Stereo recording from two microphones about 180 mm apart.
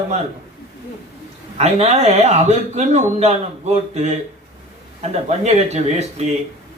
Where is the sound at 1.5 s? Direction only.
35° right (ahead or behind).